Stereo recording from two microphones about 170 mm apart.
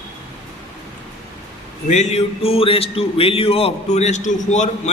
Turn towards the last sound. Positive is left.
turn(degrees=45)  # may be behind; listen again after turning